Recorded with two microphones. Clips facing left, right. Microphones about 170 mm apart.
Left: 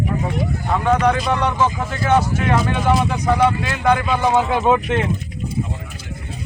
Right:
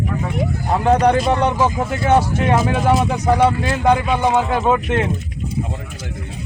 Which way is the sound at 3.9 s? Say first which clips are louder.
Right 1 dB; 15° right (ahead or behind).